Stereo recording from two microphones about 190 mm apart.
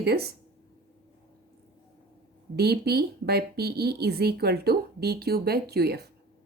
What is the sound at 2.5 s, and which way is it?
Speech, 55° right (ahead or behind).